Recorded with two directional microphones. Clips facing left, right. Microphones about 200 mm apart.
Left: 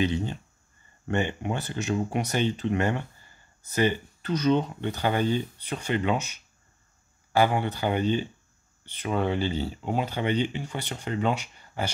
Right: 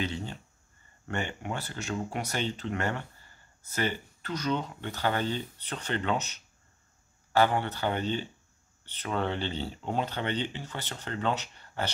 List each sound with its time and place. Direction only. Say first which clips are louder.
0.0 s speech: left 7 dB; 15° left (ahead or behind)